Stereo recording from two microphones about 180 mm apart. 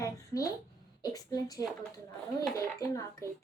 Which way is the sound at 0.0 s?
15° left (ahead or behind).